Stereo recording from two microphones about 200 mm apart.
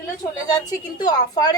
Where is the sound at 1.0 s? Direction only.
20° left (ahead or behind).